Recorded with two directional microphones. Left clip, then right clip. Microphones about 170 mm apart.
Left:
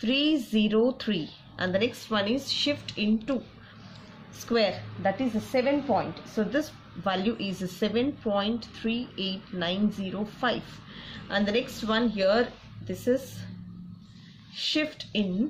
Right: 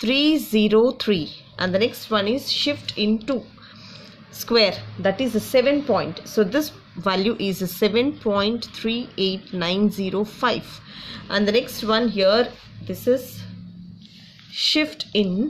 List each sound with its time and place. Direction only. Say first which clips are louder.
0.0 s a woman's voice: right 6 dB; 40° right (ahead or behind); by 3.3 s 20° right (ahead or behind)
4.5 s a woman's voice: right 7 dB; 40° right (ahead or behind); by 13.2 s 20° right (ahead or behind)
14.5 s a woman's voice: right 8 dB; 30° right (ahead or behind)